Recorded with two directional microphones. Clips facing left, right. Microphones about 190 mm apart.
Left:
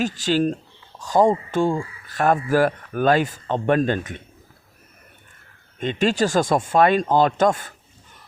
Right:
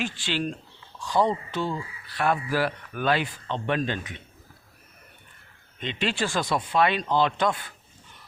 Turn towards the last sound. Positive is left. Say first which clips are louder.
# left 6 dB
turn(degrees=45)  # may be behind; listen again after turning